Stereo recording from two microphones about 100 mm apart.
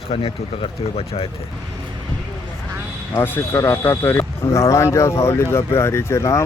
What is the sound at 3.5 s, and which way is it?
Speech, 30° left (ahead or behind).